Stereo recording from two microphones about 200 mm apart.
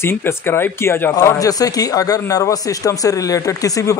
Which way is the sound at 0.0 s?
10° left (ahead or behind).